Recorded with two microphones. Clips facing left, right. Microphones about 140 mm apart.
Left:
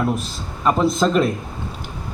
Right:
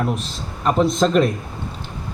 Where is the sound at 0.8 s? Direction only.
Centre (ahead or behind).